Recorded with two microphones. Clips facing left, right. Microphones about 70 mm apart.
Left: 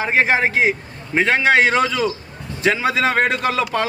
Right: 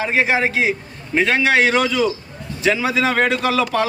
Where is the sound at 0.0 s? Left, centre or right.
Left.